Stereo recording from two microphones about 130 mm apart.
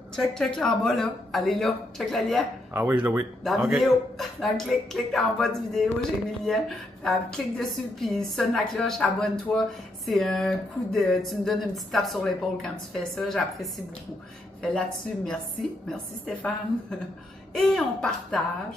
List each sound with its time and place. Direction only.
0.1 s a woman's voice: 5° left (ahead or behind)
2.7 s speech: 15° right (ahead or behind)
3.4 s a woman's voice: centre (ahead or behind)
17.6 s a woman's voice: 5° left (ahead or behind)